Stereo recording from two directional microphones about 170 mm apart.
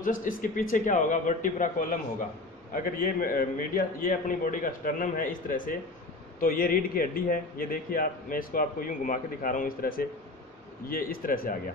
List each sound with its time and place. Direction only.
0.0 s a man's voice: 50° left (ahead or behind)